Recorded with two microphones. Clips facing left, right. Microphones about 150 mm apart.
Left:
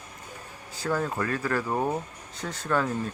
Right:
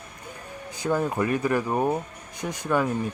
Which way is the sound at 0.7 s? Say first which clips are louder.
Right 3 dB; 15° right (ahead or behind).